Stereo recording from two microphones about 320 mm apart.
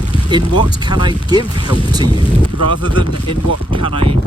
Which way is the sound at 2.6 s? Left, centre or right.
Left.